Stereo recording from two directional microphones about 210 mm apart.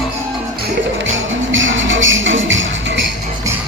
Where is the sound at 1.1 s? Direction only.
65° right (ahead or behind).